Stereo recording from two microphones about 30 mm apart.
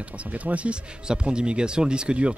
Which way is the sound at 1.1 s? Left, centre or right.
Right.